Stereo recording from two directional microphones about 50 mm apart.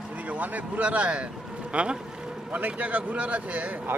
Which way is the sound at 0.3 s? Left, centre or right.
Right.